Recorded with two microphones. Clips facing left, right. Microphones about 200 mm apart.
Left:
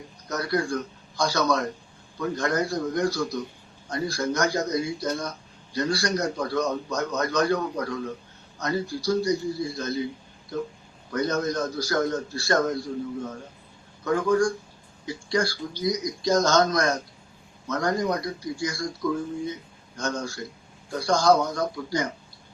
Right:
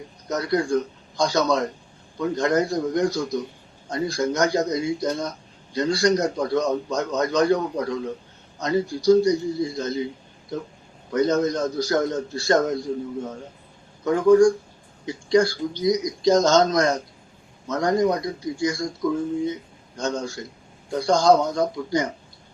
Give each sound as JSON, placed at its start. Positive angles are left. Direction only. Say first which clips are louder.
{"t": 0.3, "sound": "a man's voice", "louder": "right 4 dB", "side_deg": -20}
{"t": 11.1, "sound": "a man's voice", "louder": "right 5 dB", "side_deg": -20}
{"t": 14.0, "sound": "a man's voice", "louder": "right 7 dB", "side_deg": -25}
{"t": 20.0, "sound": "a man's voice", "louder": "right 3 dB", "side_deg": -20}